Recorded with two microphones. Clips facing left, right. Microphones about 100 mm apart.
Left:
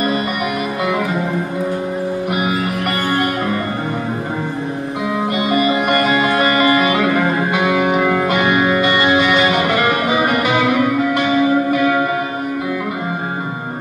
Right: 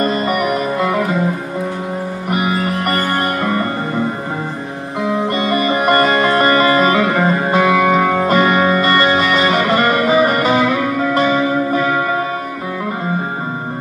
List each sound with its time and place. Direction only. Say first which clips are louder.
5.6 s music: right 3 dB; 40° right (ahead or behind)